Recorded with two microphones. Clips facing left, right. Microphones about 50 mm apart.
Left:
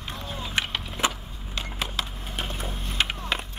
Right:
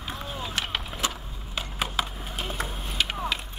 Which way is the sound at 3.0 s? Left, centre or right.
Left.